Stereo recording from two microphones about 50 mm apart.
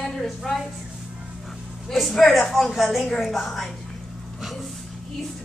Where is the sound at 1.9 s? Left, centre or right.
Centre.